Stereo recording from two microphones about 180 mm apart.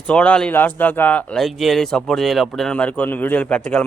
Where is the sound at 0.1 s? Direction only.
5° left (ahead or behind).